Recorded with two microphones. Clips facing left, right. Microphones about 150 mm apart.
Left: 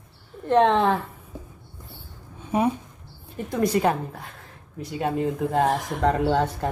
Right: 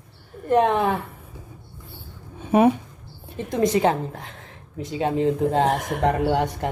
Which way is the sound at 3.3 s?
20° right (ahead or behind).